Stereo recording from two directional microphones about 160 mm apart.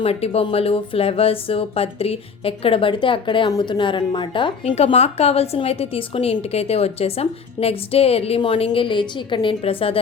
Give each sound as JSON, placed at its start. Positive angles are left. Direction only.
{"t": 0.0, "sound": "speech", "side_deg": 40}